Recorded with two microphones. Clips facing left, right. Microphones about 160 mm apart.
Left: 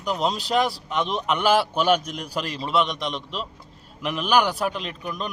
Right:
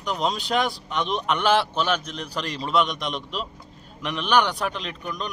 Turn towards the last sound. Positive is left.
turn(degrees=5)  # may be behind; listen again after turning